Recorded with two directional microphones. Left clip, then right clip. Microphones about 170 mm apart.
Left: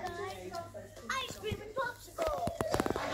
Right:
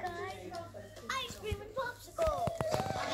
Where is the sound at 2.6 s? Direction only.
25° right (ahead or behind).